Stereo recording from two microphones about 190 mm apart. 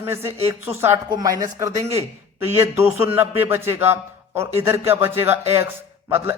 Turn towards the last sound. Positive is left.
turn(degrees=-10)  # may be behind; listen again after turning